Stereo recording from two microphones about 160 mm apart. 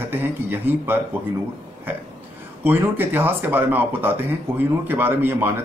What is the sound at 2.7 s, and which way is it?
Speech, 15° right (ahead or behind).